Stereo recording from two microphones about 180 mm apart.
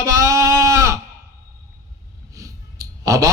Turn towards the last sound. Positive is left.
turn(degrees=-20)  # may be behind; listen again after turning